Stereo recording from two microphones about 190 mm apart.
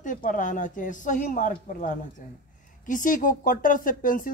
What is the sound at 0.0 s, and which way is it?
Speech, 45° left (ahead or behind).